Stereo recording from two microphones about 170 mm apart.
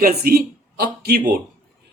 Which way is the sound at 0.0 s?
65° right (ahead or behind).